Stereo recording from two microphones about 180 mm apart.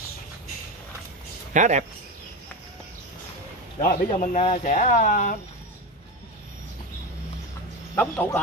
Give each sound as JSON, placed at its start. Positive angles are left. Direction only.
{"t": 1.5, "sound": "speech", "side_deg": -40}
{"t": 3.8, "sound": "speech", "side_deg": 45}
{"t": 7.9, "sound": "speech", "side_deg": 10}